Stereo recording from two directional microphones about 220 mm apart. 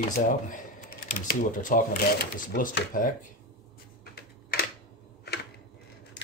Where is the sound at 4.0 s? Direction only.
45° left (ahead or behind).